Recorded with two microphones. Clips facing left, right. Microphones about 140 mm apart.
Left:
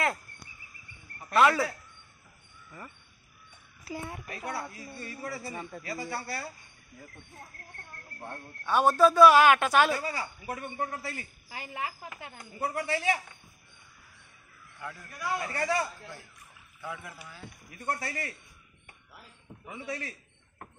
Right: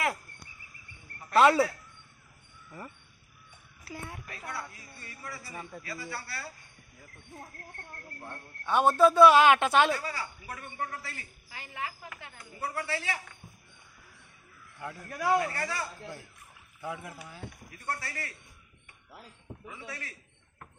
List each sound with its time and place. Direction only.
1.3 s speech: 30° right (ahead or behind)
3.8 s a woman's voice: 5° left (ahead or behind)
4.3 s speech: 25° left (ahead or behind)
8.6 s a woman's voice: 20° right (ahead or behind)
9.8 s speech: 15° left (ahead or behind)
10.4 s speech: 30° left (ahead or behind)
11.0 s speech: 15° left (ahead or behind)
15.0 s a man's voice: 90° right
15.5 s speech: 20° left (ahead or behind)
16.8 s a woman's voice: 30° right (ahead or behind)
17.7 s speech: 20° left (ahead or behind)
19.6 s speech: 25° left (ahead or behind)